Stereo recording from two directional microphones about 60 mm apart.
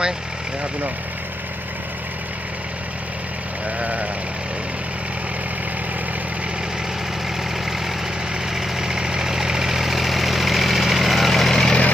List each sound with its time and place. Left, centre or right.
3.8 s sheep: right
8.5 s vehicle: centre